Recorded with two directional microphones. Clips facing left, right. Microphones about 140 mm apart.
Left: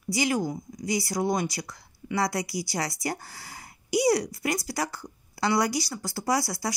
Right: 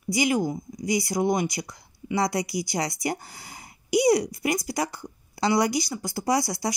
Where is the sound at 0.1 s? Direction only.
15° right (ahead or behind).